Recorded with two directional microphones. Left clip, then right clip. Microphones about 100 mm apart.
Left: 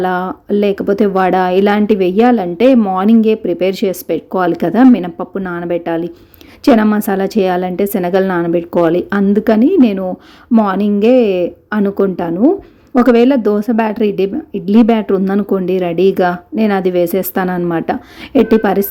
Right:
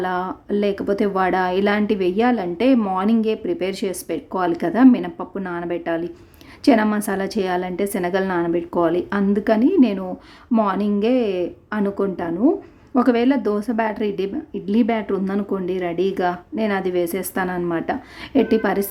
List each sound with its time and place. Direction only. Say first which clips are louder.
0.0 s speech: left 7 dB; 30° left (ahead or behind)